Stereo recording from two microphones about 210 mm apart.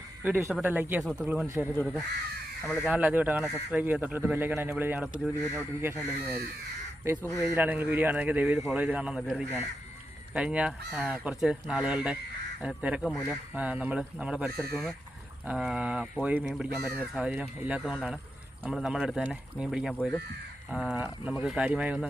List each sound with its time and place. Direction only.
0.2 s a man's voice: 10° right (ahead or behind)
1.7 s speech: 10° left (ahead or behind)
2.8 s a man's voice: 5° right (ahead or behind)
7.3 s a man's voice: 10° right (ahead or behind)